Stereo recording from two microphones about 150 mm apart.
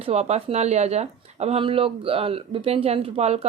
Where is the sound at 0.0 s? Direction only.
45° right (ahead or behind).